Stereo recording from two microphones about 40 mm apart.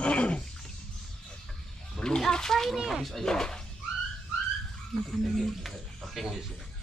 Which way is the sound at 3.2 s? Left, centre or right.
Centre.